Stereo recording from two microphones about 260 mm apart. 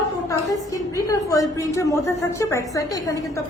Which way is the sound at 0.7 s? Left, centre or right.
Centre.